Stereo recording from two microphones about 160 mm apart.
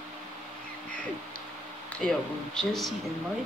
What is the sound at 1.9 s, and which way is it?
Speech, 5° left (ahead or behind).